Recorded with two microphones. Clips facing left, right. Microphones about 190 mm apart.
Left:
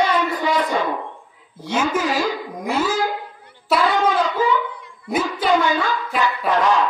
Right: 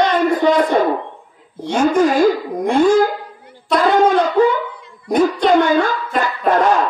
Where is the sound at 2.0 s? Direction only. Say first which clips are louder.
Right 9 dB; 50° right (ahead or behind).